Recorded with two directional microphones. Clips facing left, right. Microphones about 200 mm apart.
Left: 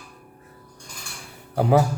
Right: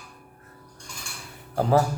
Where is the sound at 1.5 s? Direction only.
15° left (ahead or behind).